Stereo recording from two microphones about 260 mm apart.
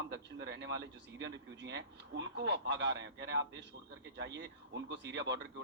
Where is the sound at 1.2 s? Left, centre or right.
Right.